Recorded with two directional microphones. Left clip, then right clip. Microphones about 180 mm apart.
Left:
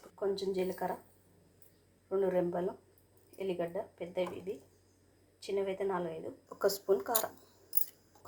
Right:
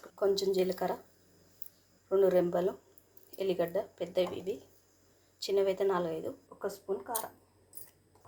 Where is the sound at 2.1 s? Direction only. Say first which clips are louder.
Right 5 dB; 30° right (ahead or behind).